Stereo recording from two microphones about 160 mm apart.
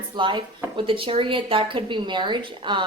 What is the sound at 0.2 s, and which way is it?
Speech, 30° right (ahead or behind).